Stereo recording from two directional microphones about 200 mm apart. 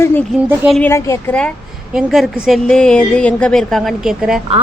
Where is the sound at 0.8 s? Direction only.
15° left (ahead or behind).